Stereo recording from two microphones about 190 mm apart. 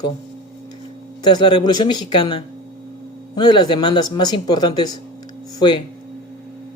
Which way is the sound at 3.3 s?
20° left (ahead or behind).